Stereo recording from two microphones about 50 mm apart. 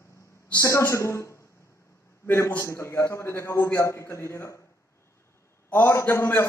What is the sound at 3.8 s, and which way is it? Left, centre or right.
Speech, left.